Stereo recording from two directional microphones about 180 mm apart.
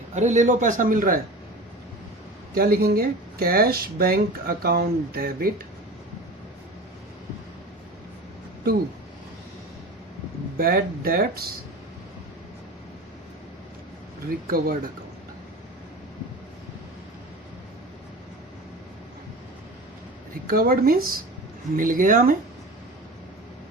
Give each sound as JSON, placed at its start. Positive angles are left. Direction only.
{"t": 0.1, "sound": "a man's voice", "side_deg": -40}
{"t": 2.6, "sound": "speech", "side_deg": -60}
{"t": 10.6, "sound": "speech", "side_deg": -55}
{"t": 14.3, "sound": "speech", "side_deg": -55}
{"t": 20.5, "sound": "a man's voice", "side_deg": -55}